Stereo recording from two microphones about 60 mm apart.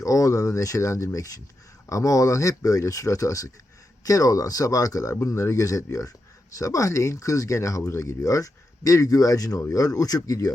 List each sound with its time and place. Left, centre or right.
0.0 s speech: left
4.0 s speech: left
5.1 s speech: left